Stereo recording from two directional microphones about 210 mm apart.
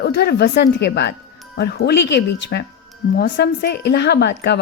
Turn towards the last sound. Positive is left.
turn(degrees=55)  # may be behind; listen again after turning